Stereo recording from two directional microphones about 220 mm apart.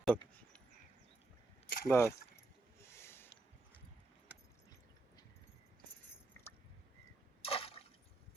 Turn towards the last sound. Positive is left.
turn(degrees=25)  # may be behind; listen again after turning